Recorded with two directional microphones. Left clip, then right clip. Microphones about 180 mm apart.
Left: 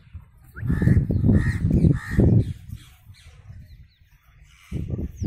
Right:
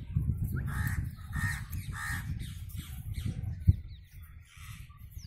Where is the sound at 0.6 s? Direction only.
Centre (ahead or behind).